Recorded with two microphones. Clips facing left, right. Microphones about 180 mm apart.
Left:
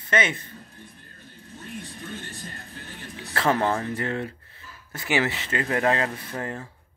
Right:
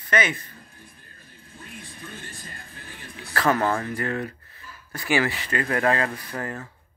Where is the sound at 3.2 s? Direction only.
25° left (ahead or behind).